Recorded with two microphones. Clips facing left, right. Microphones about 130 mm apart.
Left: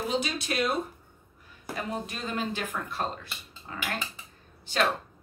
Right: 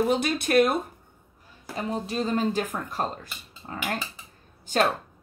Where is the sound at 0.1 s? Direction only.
55° right (ahead or behind).